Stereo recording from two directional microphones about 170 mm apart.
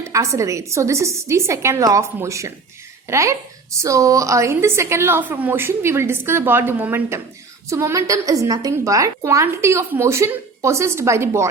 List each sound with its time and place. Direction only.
0.0 s a woman's voice: 15° right (ahead or behind)